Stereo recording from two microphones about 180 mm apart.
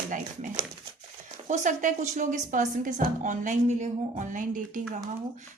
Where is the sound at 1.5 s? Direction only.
45° right (ahead or behind).